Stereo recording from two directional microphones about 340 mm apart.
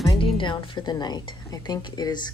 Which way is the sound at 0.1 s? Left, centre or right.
Centre.